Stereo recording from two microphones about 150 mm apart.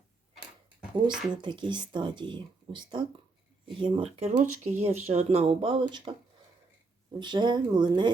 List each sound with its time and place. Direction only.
1.3 s speech: 30° right (ahead or behind)
4.3 s speech: 55° right (ahead or behind); by 6.1 s 30° right (ahead or behind)
7.2 s speech: 30° right (ahead or behind)